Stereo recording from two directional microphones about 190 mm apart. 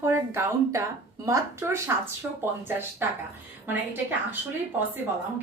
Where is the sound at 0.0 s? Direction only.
15° right (ahead or behind).